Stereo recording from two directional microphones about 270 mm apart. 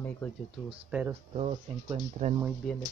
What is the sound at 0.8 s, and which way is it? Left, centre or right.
Speech, centre.